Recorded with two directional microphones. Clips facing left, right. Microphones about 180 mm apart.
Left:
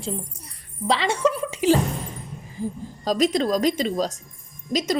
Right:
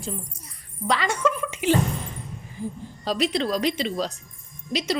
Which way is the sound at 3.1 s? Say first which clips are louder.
Left 3 dB; 45° left (ahead or behind).